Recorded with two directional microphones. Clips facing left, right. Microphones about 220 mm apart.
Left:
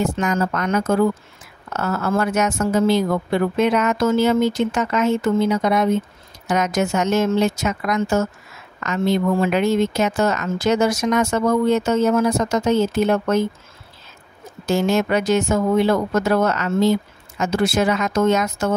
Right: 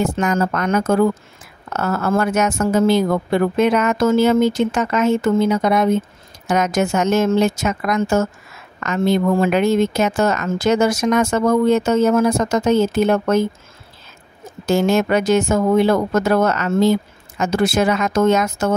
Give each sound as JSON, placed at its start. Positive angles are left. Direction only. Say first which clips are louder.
{"t": 0.0, "sound": "speech", "louder": "right 2 dB", "side_deg": -50}
{"t": 14.7, "sound": "speech", "louder": "right 2 dB", "side_deg": -50}